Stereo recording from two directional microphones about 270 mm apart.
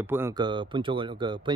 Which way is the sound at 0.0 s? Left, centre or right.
Centre.